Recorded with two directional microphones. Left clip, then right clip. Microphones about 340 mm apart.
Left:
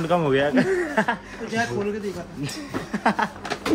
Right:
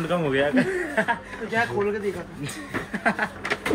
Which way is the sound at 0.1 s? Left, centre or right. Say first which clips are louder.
Left 2 dB; left.